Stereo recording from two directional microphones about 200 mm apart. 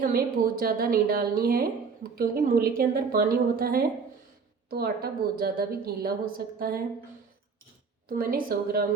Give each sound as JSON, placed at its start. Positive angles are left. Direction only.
{"t": 0.0, "sound": "a woman's voice", "side_deg": -45}
{"t": 8.2, "sound": "a woman's voice", "side_deg": -45}